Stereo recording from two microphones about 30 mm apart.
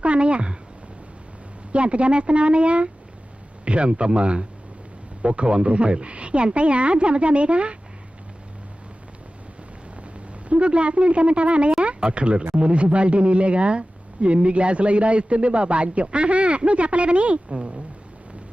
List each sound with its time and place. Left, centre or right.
0.0 s speech: right
1.7 s speech: right
10.5 s speech: right